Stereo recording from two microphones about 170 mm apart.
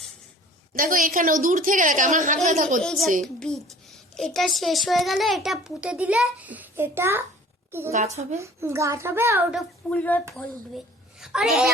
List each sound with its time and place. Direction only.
0.7 s a woman's voice: 55° right (ahead or behind)
2.8 s a child's voice: 5° left (ahead or behind); by 7.3 s 15° right (ahead or behind)
7.9 s a woman's voice: 40° right (ahead or behind)
8.4 s a child's voice: 15° right (ahead or behind)
9.6 s a woman's voice: 10° left (ahead or behind)
11.2 s a woman's voice: 5° right (ahead or behind)